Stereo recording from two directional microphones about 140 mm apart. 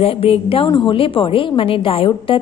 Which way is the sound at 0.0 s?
45° left (ahead or behind).